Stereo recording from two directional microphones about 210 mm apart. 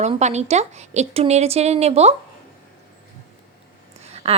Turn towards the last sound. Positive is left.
turn(degrees=-30)  # may be behind; listen again after turning